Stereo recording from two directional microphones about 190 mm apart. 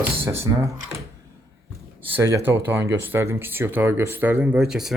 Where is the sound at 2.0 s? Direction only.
15° right (ahead or behind).